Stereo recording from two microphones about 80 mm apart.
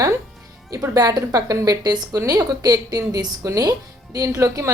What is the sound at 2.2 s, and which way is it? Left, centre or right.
Speech, right.